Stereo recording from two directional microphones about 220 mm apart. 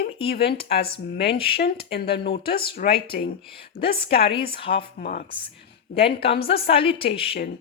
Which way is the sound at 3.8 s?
25° left (ahead or behind).